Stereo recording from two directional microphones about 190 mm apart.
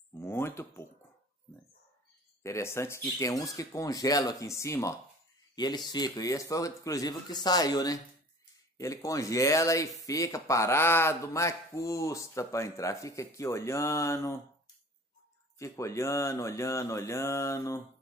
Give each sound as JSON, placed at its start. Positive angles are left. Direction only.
{"t": 0.1, "sound": "a sound", "side_deg": 15}
{"t": 2.4, "sound": "a man's voice", "side_deg": 15}
{"t": 15.6, "sound": "speech", "side_deg": 15}